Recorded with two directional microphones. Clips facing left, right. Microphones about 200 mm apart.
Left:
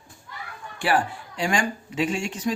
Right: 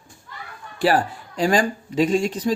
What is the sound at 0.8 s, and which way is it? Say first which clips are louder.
Speech: right 4 dB; 40° right (ahead or behind).